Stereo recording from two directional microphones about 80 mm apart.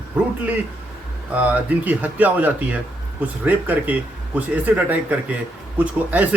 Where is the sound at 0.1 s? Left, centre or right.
Centre.